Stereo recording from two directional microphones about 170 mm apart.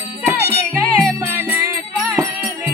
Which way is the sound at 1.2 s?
15° right (ahead or behind).